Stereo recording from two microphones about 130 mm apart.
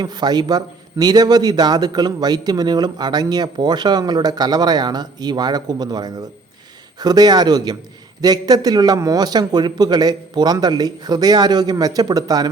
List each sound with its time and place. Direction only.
0.0 s a man's voice: 30° right (ahead or behind)